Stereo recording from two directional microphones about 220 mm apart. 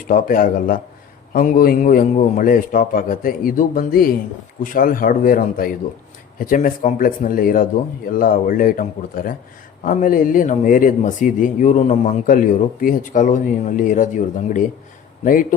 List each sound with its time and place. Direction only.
0.1 s speech: 40° left (ahead or behind)